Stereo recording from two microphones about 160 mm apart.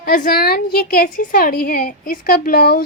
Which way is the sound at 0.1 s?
65° left (ahead or behind).